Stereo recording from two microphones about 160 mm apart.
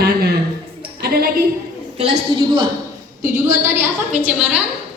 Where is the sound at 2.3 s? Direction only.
30° right (ahead or behind).